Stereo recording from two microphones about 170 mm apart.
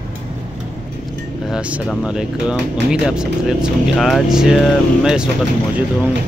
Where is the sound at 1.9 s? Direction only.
5° right (ahead or behind).